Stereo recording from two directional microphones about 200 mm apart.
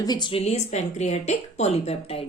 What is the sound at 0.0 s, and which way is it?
A woman's voice, 20° left (ahead or behind).